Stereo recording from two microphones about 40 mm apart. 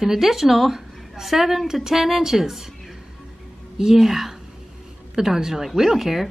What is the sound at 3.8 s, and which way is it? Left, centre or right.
Speech, centre.